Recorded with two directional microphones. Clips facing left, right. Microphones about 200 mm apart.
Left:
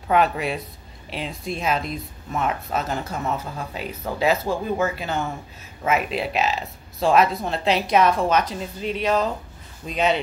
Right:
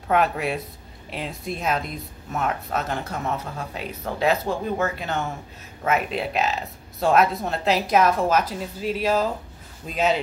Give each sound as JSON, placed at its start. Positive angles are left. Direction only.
{"t": 0.1, "sound": "speech", "side_deg": 0}